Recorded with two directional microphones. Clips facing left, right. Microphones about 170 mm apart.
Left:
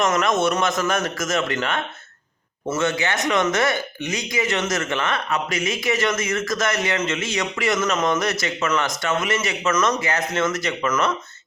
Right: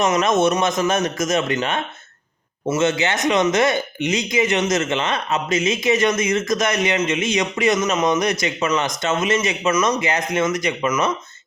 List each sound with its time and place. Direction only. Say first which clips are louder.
0.0 s speech: right 3 dB; 20° right (ahead or behind)